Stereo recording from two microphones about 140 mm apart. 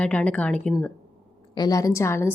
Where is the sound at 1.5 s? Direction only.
25° left (ahead or behind).